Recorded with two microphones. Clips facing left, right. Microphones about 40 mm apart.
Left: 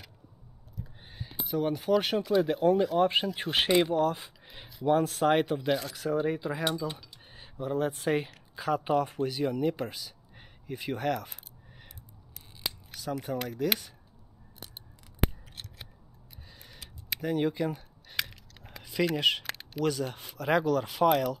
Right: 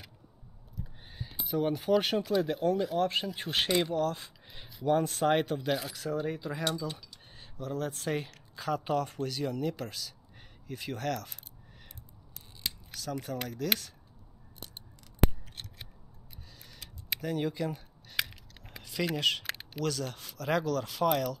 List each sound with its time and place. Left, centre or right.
0.7 s speech: centre
12.4 s scissors: centre
13.3 s speech: centre
15.2 s scissors: centre
16.4 s a sound: centre
17.2 s speech: centre
18.1 s keys jangling: centre
19.1 s speech: centre
19.4 s a sound: centre
19.8 s speech: centre